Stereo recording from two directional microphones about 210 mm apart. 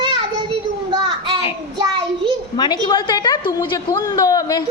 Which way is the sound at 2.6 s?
20° left (ahead or behind).